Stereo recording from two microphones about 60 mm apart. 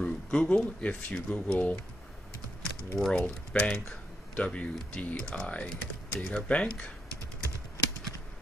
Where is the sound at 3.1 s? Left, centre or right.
Centre.